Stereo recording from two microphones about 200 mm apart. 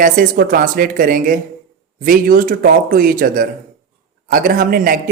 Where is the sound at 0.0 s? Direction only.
45° right (ahead or behind).